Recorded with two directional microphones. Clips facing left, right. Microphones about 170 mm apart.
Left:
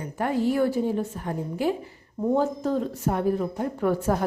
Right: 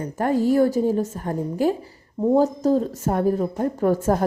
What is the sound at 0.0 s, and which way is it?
A woman's voice, 40° right (ahead or behind).